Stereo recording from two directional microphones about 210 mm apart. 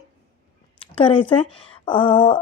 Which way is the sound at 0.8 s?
25° left (ahead or behind).